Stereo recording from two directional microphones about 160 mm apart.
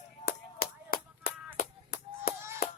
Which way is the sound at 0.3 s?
70° left (ahead or behind).